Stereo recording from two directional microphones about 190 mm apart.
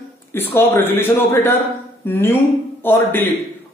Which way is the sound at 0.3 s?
10° left (ahead or behind).